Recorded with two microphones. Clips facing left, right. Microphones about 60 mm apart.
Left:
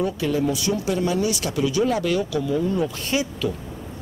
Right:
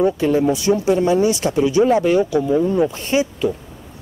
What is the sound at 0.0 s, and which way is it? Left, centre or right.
Speech, right.